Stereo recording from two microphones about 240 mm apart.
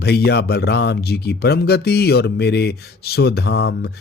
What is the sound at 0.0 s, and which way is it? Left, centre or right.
Speech, left.